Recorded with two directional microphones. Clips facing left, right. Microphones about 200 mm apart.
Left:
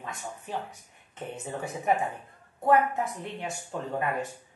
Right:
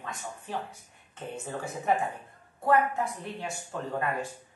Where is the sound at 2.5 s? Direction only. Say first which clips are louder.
Left 2 dB; 20° left (ahead or behind).